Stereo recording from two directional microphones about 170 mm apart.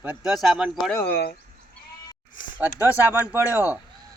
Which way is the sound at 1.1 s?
75° left (ahead or behind).